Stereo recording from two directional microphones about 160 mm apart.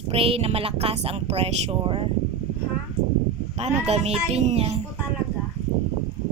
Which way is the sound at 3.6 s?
40° right (ahead or behind).